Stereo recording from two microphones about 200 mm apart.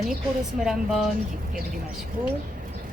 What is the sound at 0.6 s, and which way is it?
Speech, centre (ahead or behind).